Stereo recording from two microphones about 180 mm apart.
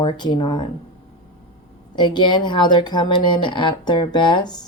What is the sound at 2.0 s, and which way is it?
Speech, 25° left (ahead or behind).